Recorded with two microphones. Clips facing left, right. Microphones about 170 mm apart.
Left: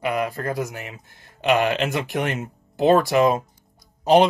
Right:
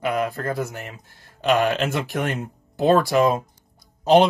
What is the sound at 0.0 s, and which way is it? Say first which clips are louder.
Speech: even; 10° left (ahead or behind).